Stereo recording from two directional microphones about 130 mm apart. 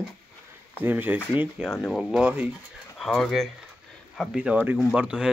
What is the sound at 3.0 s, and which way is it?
Speech, centre (ahead or behind).